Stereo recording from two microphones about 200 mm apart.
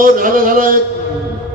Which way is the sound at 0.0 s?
45° right (ahead or behind).